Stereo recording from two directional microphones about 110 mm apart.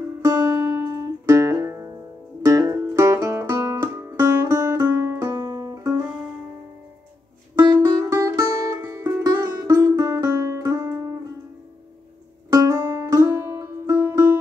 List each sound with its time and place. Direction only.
0.2 s music: 30° right (ahead or behind)
5.4 s music: 35° right (ahead or behind)
7.8 s music: 25° right (ahead or behind)
12.4 s music: 30° right (ahead or behind)